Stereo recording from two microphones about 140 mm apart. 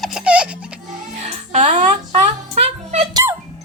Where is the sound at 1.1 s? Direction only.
55° right (ahead or behind).